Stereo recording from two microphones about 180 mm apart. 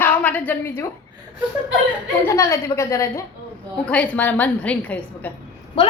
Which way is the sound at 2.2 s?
15° left (ahead or behind).